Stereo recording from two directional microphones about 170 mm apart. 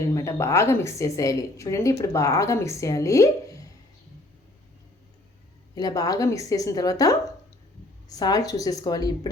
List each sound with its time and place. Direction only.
0.1 s a woman's voice: 15° left (ahead or behind)
5.7 s a woman's voice: 20° left (ahead or behind)